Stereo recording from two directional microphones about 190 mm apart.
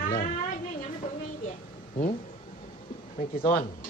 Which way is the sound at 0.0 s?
45° left (ahead or behind).